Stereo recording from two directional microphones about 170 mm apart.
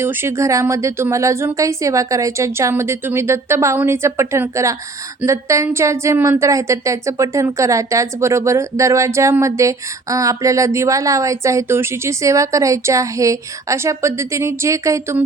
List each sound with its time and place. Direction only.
0.0 s a woman's voice: 15° right (ahead or behind)